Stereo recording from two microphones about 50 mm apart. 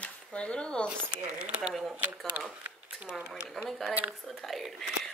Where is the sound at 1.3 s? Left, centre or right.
Right.